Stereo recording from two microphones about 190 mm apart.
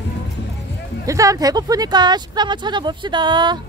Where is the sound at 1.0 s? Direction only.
15° right (ahead or behind).